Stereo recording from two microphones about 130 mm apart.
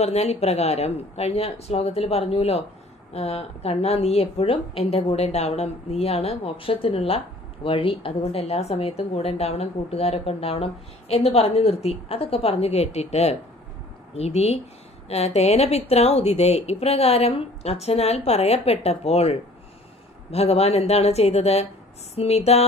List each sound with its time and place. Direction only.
0.0 s speech: 55° left (ahead or behind)